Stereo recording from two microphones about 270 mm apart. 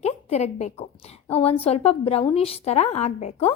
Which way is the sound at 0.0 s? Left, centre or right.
Left.